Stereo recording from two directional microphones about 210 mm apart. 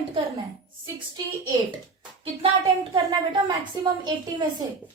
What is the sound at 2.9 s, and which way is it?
Speech, 25° right (ahead or behind).